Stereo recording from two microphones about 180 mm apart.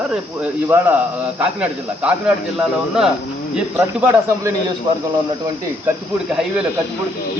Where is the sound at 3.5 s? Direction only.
10° right (ahead or behind).